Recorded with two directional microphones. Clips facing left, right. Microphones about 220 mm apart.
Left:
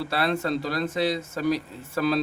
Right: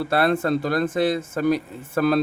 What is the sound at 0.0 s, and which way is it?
Speech, 50° right (ahead or behind).